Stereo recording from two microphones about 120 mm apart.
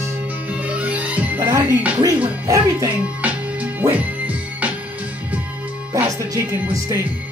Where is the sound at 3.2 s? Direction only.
10° right (ahead or behind).